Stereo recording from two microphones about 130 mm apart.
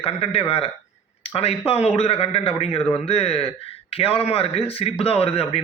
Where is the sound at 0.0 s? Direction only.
50° left (ahead or behind).